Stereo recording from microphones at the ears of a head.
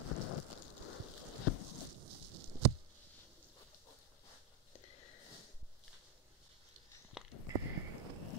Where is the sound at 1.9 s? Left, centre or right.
Right.